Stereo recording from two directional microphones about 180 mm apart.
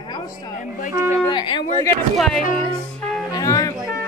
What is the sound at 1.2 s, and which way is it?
Speech, 25° left (ahead or behind).